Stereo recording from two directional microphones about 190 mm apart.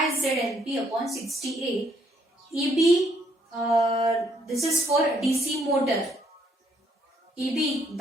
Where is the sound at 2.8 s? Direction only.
Centre (ahead or behind).